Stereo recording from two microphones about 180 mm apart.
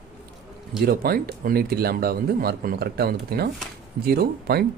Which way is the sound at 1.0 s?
55° right (ahead or behind).